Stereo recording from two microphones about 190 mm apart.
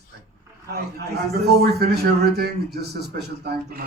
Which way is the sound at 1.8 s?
55° right (ahead or behind).